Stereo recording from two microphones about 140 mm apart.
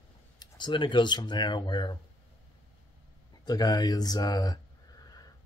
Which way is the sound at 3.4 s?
30° left (ahead or behind).